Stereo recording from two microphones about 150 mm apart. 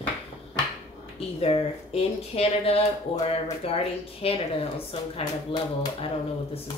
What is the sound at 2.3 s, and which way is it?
Speech, 40° left (ahead or behind).